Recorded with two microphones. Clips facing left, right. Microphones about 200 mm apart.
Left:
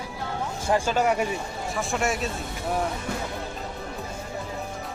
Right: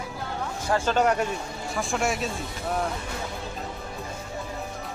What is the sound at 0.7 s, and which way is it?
A man's voice, 10° left (ahead or behind).